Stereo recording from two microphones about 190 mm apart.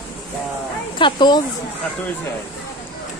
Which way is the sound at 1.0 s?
25° left (ahead or behind).